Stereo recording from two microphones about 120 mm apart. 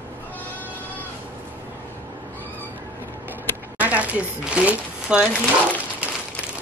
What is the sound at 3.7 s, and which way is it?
Speech, 10° right (ahead or behind).